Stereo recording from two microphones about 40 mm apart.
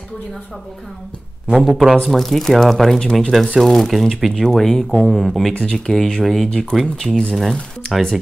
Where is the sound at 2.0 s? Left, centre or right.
Centre.